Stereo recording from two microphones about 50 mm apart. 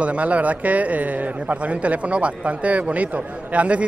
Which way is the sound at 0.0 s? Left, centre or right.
Right.